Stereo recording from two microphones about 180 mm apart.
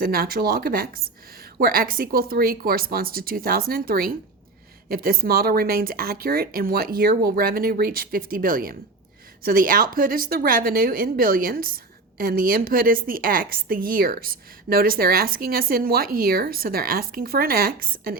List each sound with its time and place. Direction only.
0.0 s a woman's voice: 55° right (ahead or behind)